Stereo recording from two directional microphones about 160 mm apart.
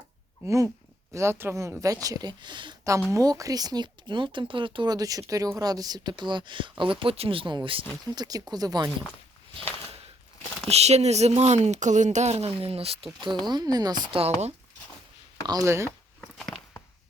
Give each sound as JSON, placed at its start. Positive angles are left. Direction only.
{"t": 0.4, "sound": "speech", "side_deg": -20}
{"t": 10.7, "sound": "speech", "side_deg": -40}
{"t": 15.4, "sound": "speech", "side_deg": -20}
{"t": 16.2, "sound": "walk", "side_deg": 5}